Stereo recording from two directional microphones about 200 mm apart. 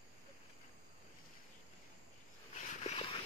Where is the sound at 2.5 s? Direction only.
35° left (ahead or behind).